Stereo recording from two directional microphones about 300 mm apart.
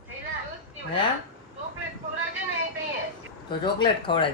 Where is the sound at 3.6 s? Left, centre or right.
Centre.